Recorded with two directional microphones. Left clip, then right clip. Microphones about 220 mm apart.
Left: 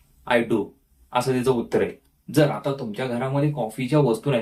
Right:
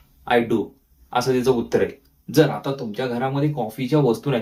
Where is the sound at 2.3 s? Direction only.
5° right (ahead or behind).